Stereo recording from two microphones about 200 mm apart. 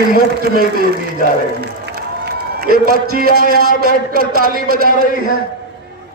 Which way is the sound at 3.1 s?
45° right (ahead or behind).